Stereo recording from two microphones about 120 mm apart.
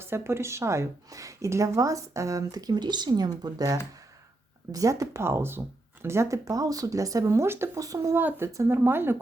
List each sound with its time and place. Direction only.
0.0 s a woman's voice: 20° right (ahead or behind)
8.2 s a woman's voice: 15° right (ahead or behind)